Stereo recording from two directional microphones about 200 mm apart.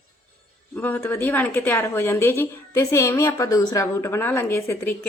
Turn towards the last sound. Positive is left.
turn(degrees=15)  # may be behind; listen again after turning